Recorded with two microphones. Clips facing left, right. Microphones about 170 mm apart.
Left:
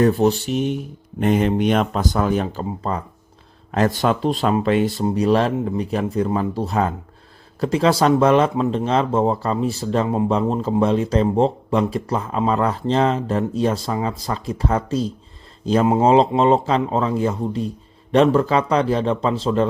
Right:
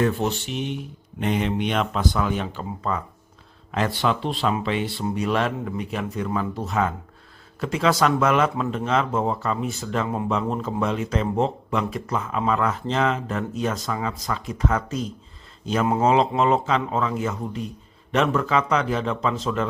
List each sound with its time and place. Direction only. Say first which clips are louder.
0.0 s speech: left 7 dB; 35° left (ahead or behind)